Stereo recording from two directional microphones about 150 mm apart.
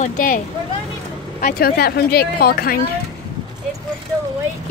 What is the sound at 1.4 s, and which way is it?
Speech, 85° left.